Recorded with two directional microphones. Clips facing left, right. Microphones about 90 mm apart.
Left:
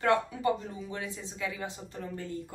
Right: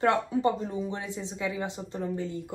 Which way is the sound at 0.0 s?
25° right (ahead or behind).